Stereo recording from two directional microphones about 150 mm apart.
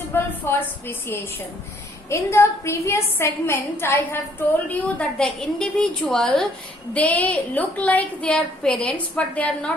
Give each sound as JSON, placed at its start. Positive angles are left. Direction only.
{"t": 0.1, "sound": "a woman's voice", "side_deg": 15}